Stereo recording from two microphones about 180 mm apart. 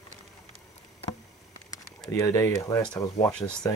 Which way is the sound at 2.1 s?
15° left (ahead or behind).